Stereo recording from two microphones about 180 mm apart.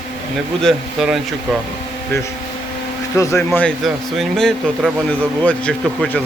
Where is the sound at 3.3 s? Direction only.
5° left (ahead or behind).